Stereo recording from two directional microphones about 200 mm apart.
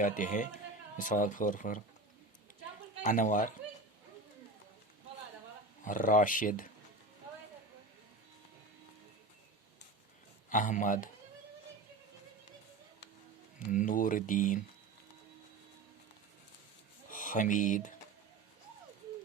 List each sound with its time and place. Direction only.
0.0 s speech: 40° left (ahead or behind)
3.0 s speech: 40° left (ahead or behind)
5.8 s speech: 40° left (ahead or behind)
10.5 s speech: 40° left (ahead or behind)
13.7 s speech: 40° left (ahead or behind)
17.1 s speech: 40° left (ahead or behind)